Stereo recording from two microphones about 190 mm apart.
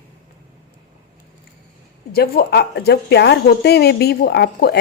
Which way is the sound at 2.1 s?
55° left (ahead or behind).